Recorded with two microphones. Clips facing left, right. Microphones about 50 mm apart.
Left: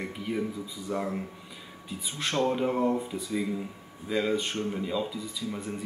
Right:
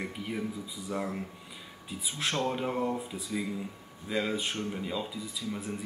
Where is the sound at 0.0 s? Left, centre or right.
Centre.